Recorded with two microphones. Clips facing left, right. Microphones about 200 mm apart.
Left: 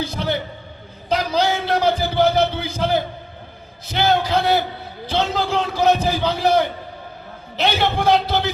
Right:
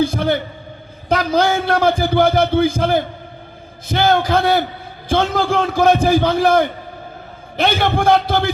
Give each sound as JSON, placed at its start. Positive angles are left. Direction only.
{"t": 0.0, "sound": "speech", "side_deg": -50}